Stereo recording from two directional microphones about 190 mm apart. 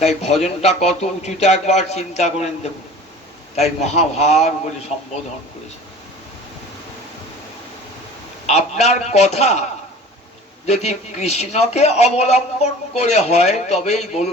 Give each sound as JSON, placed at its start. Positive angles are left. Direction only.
{"t": 0.0, "sound": "a man's voice", "side_deg": 35}
{"t": 3.5, "sound": "a man's voice", "side_deg": 35}
{"t": 8.4, "sound": "a man's voice", "side_deg": 35}
{"t": 10.7, "sound": "a man's voice", "side_deg": 35}